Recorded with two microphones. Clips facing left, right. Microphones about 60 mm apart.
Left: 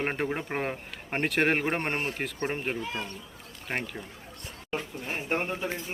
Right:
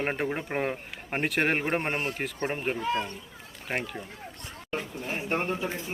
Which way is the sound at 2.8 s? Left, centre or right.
Right.